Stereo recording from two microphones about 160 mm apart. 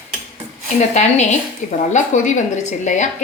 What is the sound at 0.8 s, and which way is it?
A woman's voice, 45° left (ahead or behind).